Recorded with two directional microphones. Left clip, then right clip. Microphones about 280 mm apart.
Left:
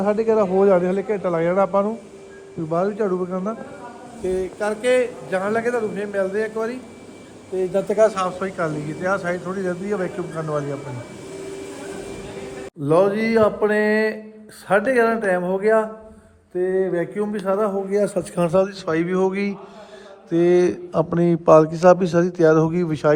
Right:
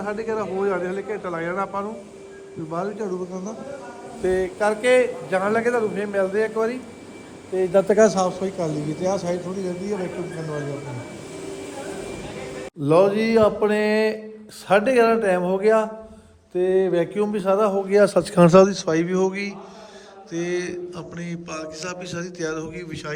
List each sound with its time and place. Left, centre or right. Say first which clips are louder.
0.0 s a man's voice: left 8 dB; centre
1.5 s speech: left 9 dB; right
2.7 s a man's voice: left 6 dB; centre
3.1 s a sound: left 5 dB; centre
4.2 s a man's voice: right 2 dB; centre
14.7 s a sound: right 1 dB; centre
18.1 s speech: right 5 dB; right
18.7 s a man's voice: even; centre